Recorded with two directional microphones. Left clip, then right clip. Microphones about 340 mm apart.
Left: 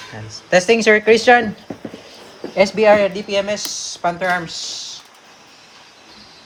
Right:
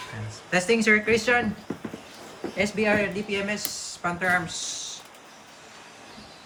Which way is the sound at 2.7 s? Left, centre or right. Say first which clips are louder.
Left 11 dB; centre.